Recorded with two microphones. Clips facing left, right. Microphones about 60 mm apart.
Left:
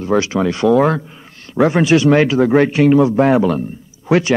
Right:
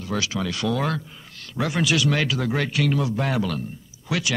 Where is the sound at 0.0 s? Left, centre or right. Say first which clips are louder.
Left 11 dB; left.